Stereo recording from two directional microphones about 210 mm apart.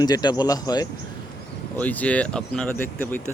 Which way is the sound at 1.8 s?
5° left (ahead or behind).